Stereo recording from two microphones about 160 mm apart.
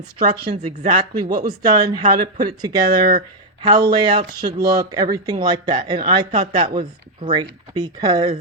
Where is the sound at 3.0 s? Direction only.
60° right (ahead or behind).